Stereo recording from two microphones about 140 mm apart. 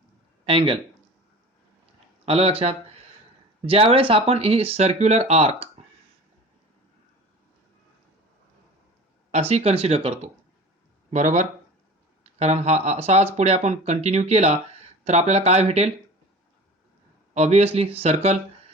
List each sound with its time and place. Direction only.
0.4 s speech: 40° right (ahead or behind)
2.2 s speech: 45° right (ahead or behind)
3.9 s speech: 40° right (ahead or behind)
9.3 s speech: 50° right (ahead or behind)
11.1 s speech: 60° right (ahead or behind)
17.3 s speech: 50° right (ahead or behind)